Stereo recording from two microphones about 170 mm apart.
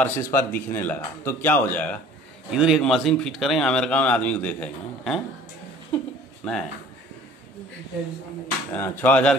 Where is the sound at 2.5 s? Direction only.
5° right (ahead or behind).